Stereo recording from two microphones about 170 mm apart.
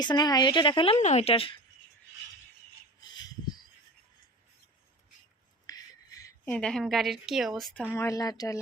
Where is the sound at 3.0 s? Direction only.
25° left (ahead or behind).